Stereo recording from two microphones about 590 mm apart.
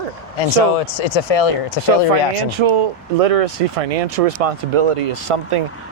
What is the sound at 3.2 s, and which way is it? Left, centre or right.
Speech, right.